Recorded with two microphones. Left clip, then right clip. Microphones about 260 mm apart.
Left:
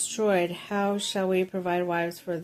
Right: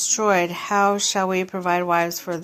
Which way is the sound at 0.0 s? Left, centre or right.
Centre.